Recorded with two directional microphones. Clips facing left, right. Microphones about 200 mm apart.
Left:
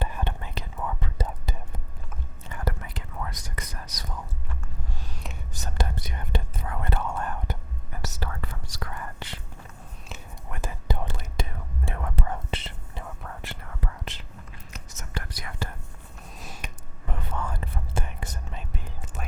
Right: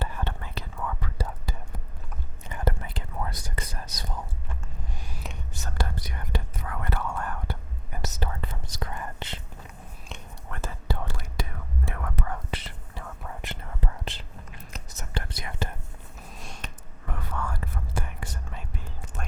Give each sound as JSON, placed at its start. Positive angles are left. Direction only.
{"t": 0.0, "sound": "whispering", "side_deg": 15}
{"t": 2.5, "sound": "whispering", "side_deg": -25}
{"t": 5.6, "sound": "whispering", "side_deg": 20}
{"t": 8.0, "sound": "whispering", "side_deg": -20}
{"t": 10.1, "sound": "whispering", "side_deg": 15}
{"t": 13.4, "sound": "whispering", "side_deg": -20}
{"t": 14.0, "sound": "whispering", "side_deg": -30}
{"t": 16.4, "sound": "a sound", "side_deg": 10}
{"t": 17.1, "sound": "whispering", "side_deg": 20}